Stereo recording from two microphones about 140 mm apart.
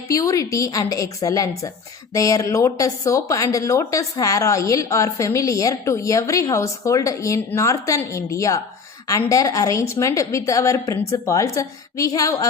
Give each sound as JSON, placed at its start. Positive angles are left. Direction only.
{"t": 0.1, "sound": "speech", "side_deg": 25}